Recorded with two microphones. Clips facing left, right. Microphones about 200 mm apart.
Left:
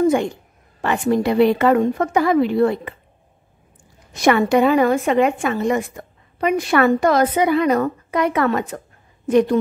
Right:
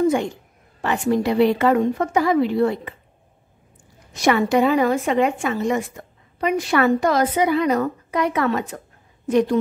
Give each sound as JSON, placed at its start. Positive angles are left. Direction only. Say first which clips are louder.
{"t": 0.8, "sound": "a woman's voice", "louder": "left 2 dB", "side_deg": 55}
{"t": 4.1, "sound": "a woman's voice", "louder": "left 2 dB", "side_deg": 55}